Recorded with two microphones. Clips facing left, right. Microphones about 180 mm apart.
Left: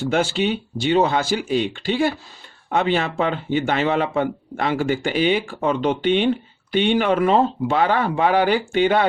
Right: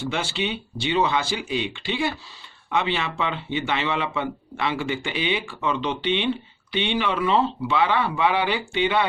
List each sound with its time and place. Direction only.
0.1 s speech: 45° left (ahead or behind)